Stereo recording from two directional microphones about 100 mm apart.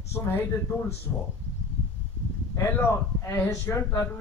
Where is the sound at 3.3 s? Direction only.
25° left (ahead or behind).